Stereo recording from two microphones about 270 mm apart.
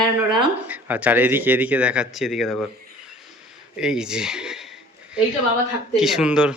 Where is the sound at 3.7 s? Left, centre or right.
Centre.